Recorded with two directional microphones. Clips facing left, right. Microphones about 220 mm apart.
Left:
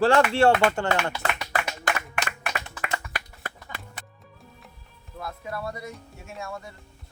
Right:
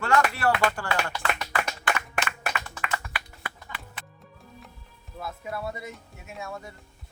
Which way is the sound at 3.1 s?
45° left (ahead or behind).